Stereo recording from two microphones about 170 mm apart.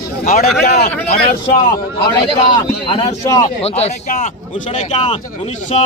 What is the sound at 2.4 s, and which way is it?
A man's voice, 30° left (ahead or behind).